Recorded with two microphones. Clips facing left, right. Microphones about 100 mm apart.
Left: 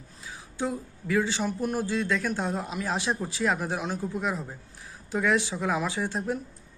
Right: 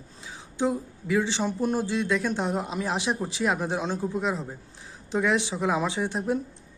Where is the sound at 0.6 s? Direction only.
20° right (ahead or behind).